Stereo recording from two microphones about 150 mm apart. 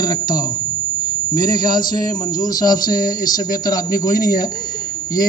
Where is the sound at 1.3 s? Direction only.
25° left (ahead or behind).